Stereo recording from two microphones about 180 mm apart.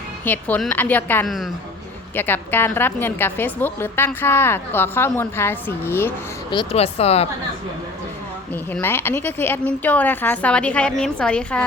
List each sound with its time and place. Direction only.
0.3 s a woman's voice: 10° left (ahead or behind)
6.5 s speech: 30° left (ahead or behind)
8.7 s a woman's voice: 10° left (ahead or behind)